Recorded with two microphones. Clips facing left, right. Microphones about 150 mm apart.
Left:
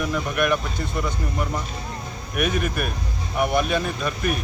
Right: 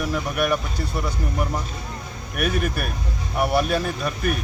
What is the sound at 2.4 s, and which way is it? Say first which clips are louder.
Speech: even; 40° right (ahead or behind).